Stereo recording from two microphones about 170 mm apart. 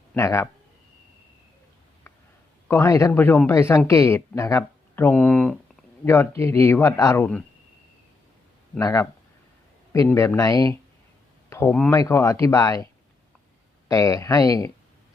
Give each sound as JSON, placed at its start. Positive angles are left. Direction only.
{"t": 0.1, "sound": "speech", "side_deg": 15}
{"t": 2.6, "sound": "a man's voice", "side_deg": 15}
{"t": 8.8, "sound": "speech", "side_deg": 20}